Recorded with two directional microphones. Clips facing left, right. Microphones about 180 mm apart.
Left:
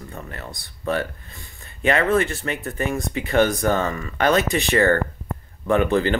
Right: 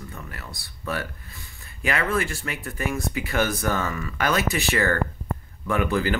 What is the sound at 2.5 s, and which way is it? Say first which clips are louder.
Speech: left 5 dB; 35° left (ahead or behind).